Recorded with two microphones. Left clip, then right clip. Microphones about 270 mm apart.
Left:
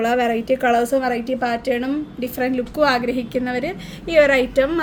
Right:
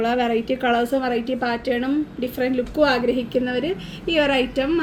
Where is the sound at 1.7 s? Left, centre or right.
Left.